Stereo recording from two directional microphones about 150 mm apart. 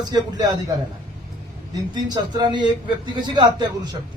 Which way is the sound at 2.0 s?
30° right (ahead or behind).